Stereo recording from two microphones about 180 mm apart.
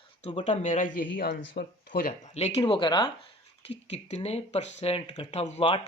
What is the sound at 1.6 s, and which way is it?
Speech, 70° left (ahead or behind).